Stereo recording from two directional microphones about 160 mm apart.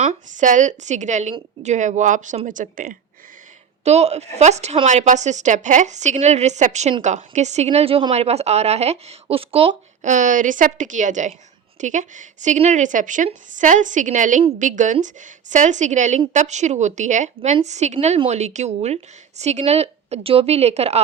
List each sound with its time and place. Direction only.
0.0 s a woman's voice: 50° right (ahead or behind)
3.8 s a woman's voice: 40° right (ahead or behind)
10.1 s a woman's voice: 50° right (ahead or behind)